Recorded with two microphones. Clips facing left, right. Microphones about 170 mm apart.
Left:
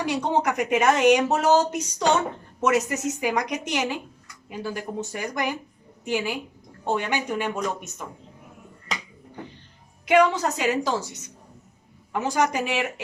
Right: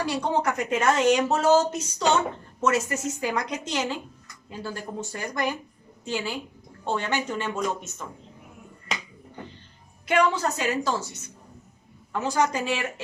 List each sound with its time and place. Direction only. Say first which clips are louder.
0.0 s a woman's voice: left 1 dB; 15° left (ahead or behind)
10.1 s a woman's voice: left 3 dB; 15° left (ahead or behind)